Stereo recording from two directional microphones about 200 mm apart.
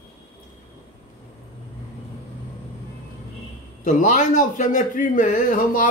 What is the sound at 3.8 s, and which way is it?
A man's voice, 40° left (ahead or behind).